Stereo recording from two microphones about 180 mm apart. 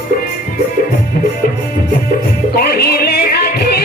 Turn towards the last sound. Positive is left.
turn(degrees=60)  # may be behind; listen again after turning